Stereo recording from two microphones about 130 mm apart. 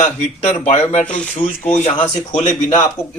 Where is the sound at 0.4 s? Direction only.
55° left (ahead or behind).